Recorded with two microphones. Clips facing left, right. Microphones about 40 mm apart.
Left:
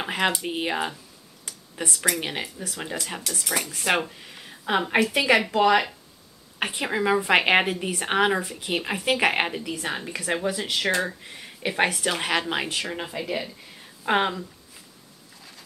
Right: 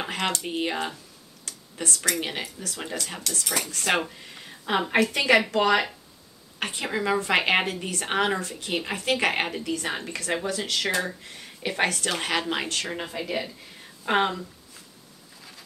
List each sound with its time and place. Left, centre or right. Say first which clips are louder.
0.0 s speech: left 3 dB; centre
1.4 s a sound: left 1 dB; centre
2.0 s speech: left 2 dB; centre
6.6 s speech: left 3 dB; centre